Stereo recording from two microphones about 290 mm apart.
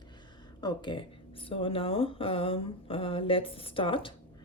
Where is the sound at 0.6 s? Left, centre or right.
Centre.